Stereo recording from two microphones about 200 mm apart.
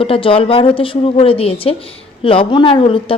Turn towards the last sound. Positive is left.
turn(degrees=25)  # may be behind; listen again after turning